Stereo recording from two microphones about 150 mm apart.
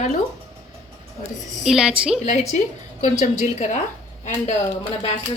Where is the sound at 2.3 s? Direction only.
50° left (ahead or behind).